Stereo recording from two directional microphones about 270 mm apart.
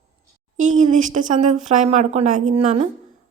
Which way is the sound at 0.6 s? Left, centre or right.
Right.